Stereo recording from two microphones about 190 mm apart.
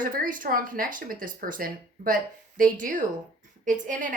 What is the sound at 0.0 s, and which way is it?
A woman's voice, 45° right (ahead or behind).